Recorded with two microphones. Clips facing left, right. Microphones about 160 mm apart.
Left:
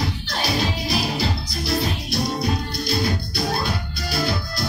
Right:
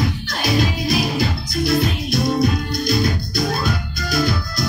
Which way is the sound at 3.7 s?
45° right (ahead or behind).